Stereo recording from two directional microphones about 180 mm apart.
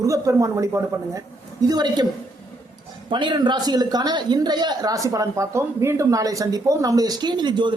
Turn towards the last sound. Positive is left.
turn(degrees=-25)  # may be behind; listen again after turning